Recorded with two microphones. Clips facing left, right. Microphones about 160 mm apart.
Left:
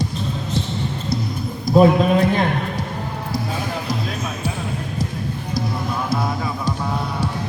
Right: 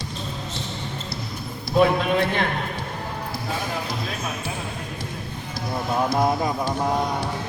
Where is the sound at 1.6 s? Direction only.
40° left (ahead or behind).